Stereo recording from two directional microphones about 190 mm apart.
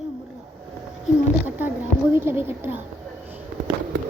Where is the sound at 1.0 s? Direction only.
10° right (ahead or behind).